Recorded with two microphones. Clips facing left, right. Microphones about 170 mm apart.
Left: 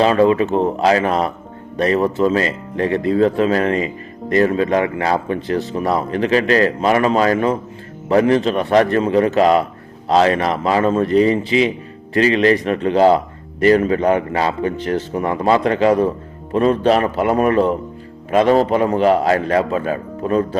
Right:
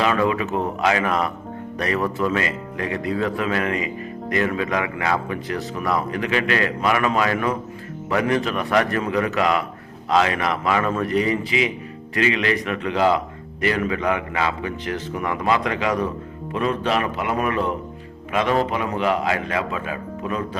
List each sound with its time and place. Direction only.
0.0 s a man's voice: 30° left (ahead or behind)